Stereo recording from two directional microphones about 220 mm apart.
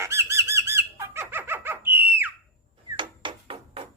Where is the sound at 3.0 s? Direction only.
25° right (ahead or behind).